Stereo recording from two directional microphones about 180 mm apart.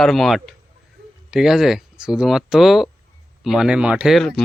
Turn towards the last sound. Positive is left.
turn(degrees=0)  # may be behind; listen again after turning